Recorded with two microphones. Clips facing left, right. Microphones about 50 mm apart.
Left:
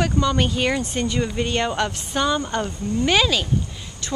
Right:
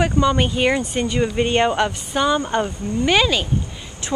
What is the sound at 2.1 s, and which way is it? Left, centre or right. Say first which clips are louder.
A woman's voice: right 3 dB; centre.